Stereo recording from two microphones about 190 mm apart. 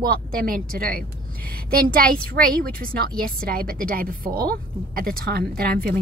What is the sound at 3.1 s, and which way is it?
Speech, 5° left (ahead or behind).